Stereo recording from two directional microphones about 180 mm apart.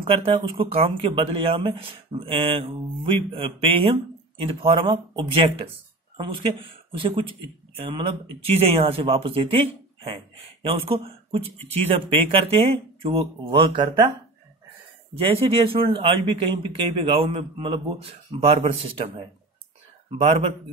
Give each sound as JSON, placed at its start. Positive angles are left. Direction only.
{"t": 0.0, "sound": "speech", "side_deg": -30}
{"t": 15.3, "sound": "speech", "side_deg": -30}